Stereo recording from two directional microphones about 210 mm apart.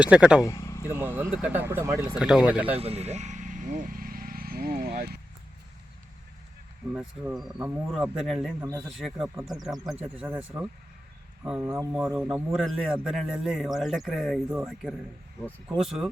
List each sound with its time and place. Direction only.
0.0 s a man's voice: 5° right (ahead or behind)
0.4 s a sound: 15° left (ahead or behind)
0.9 s speech: 10° right (ahead or behind)
2.1 s a man's voice: 5° right (ahead or behind)
2.7 s a sound: 30° right (ahead or behind); by 5.1 s 45° right (ahead or behind)
7.3 s a man's voice: 5° right (ahead or behind)